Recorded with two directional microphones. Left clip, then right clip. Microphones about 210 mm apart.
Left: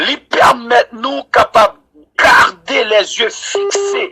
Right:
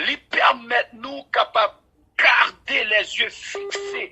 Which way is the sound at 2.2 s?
5° left (ahead or behind).